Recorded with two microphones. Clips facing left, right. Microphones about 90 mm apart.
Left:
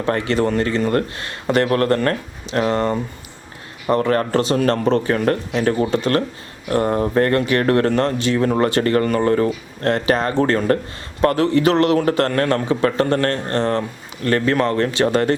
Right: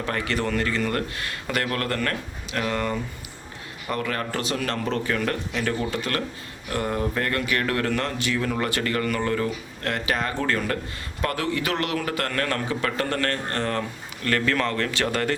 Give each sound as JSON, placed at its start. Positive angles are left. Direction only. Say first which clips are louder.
{"t": 0.0, "sound": "speech", "louder": "left 8 dB", "side_deg": 30}